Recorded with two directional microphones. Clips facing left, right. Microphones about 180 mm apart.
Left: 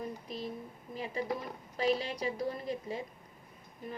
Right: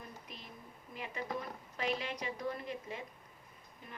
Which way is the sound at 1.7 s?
35° left (ahead or behind).